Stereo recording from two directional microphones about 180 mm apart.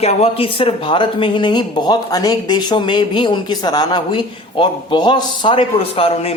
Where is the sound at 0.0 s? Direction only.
35° left (ahead or behind).